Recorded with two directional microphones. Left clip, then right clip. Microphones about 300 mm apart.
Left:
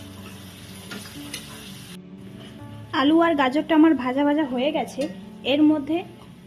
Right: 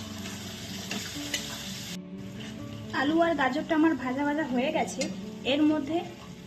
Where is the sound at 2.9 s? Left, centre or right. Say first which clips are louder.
Left 7 dB; left.